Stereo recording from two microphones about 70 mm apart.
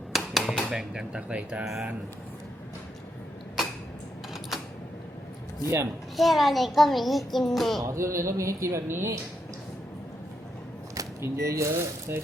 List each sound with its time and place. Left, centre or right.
0.1 s a sound: centre
1.6 s a child's voice: centre
5.6 s speech: right
6.1 s a child's voice: centre
7.9 s speech: right
11.2 s speech: right